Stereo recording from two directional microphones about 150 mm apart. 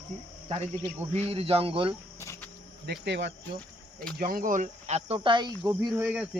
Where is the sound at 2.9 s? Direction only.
90° right.